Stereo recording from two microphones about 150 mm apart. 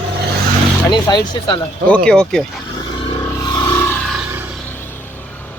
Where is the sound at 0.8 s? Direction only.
30° left (ahead or behind).